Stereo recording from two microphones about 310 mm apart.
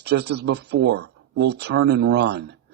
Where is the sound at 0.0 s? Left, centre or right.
Right.